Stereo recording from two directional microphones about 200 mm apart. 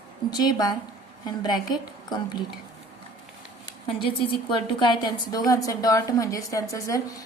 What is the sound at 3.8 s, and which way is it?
A woman's voice, 25° left (ahead or behind).